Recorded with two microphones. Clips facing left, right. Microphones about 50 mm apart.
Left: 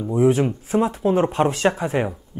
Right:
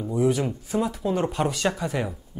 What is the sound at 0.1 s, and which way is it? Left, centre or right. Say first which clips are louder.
Speech: left 6 dB; left.